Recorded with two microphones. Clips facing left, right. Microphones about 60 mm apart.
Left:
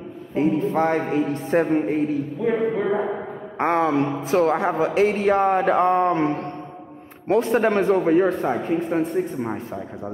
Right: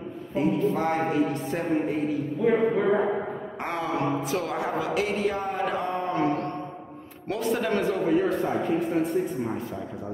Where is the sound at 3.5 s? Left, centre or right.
Left.